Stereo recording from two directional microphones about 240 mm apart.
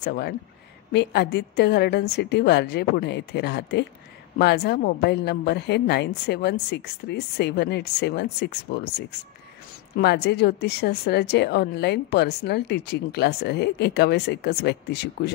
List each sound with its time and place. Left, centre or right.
0.0 s a woman's voice: left